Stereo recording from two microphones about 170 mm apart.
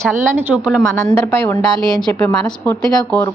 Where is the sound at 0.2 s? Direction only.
10° right (ahead or behind).